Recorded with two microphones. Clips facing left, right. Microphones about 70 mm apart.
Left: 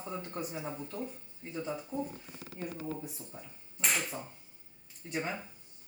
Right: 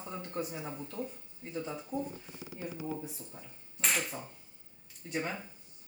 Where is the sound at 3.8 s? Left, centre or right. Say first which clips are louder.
Even; centre.